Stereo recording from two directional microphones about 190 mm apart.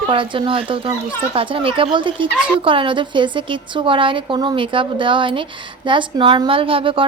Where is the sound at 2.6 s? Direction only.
25° right (ahead or behind).